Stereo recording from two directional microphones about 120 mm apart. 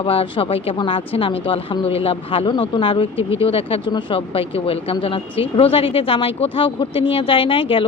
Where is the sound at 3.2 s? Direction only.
25° right (ahead or behind).